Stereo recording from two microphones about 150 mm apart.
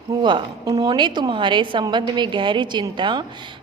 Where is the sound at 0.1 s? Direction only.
30° right (ahead or behind).